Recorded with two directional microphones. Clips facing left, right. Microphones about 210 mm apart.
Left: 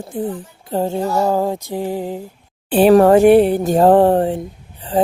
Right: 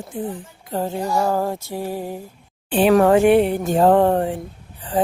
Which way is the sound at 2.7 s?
35° left (ahead or behind).